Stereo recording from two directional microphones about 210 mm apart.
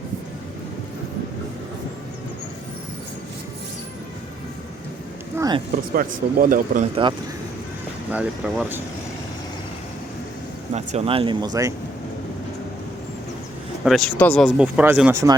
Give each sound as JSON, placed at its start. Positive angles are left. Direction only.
{"t": 5.4, "sound": "a sound", "side_deg": -20}
{"t": 5.9, "sound": "speech", "side_deg": -40}
{"t": 8.1, "sound": "speech", "side_deg": -5}
{"t": 10.8, "sound": "speech", "side_deg": -30}
{"t": 13.8, "sound": "speech", "side_deg": 0}